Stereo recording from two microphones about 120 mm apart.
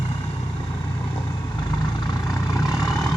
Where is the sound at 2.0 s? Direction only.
30° left (ahead or behind).